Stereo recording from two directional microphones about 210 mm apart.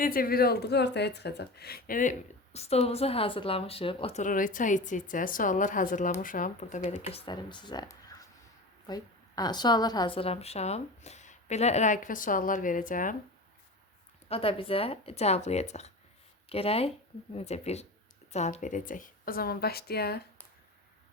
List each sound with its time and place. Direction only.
0.0 s speech: 45° left (ahead or behind)
14.3 s a woman's voice: 25° left (ahead or behind); by 20.2 s 50° left (ahead or behind)